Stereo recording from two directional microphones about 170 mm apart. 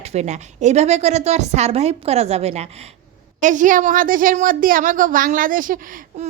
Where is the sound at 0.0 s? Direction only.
40° right (ahead or behind).